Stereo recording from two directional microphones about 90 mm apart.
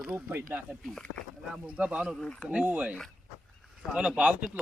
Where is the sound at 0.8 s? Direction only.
5° left (ahead or behind).